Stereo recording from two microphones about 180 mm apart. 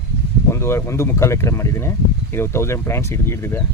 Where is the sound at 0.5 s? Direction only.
15° left (ahead or behind).